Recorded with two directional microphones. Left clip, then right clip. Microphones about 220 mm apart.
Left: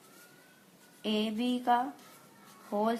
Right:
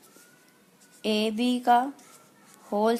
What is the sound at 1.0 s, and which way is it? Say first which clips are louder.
Speech: right 6 dB; 50° right (ahead or behind).